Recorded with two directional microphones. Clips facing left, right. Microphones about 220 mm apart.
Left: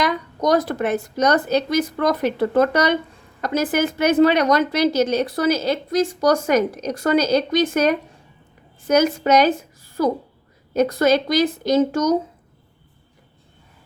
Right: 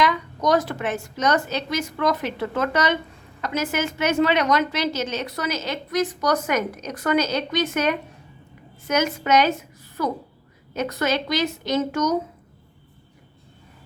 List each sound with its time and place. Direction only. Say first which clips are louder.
0.0 s a woman's voice: left 1 dB; 35° left (ahead or behind)